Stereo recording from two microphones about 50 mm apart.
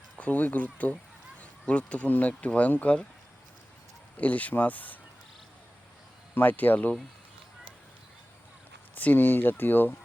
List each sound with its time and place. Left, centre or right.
0.2 s speech: left
1.4 s a sound: left
2.0 s speech: left
4.2 s speech: left
6.3 s speech: left
9.0 s speech: left